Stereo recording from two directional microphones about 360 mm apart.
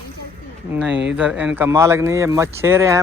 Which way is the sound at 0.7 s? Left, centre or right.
Centre.